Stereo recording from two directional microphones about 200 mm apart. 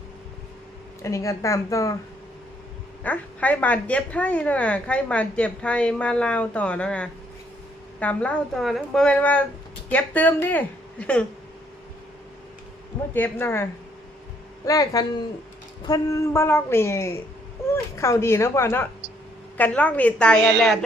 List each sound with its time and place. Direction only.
1.0 s a woman's voice: 15° left (ahead or behind)
3.0 s a woman's voice: 10° left (ahead or behind)
13.1 s a woman's voice: 10° left (ahead or behind)